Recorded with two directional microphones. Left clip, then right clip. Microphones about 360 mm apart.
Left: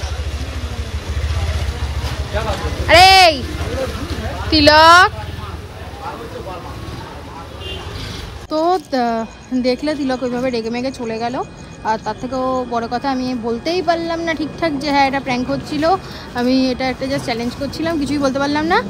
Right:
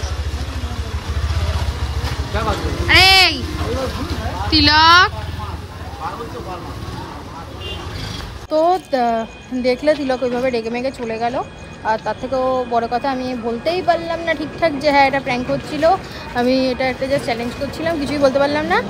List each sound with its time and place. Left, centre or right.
2.9 s a sound: centre
4.5 s speech: centre
8.5 s speech: centre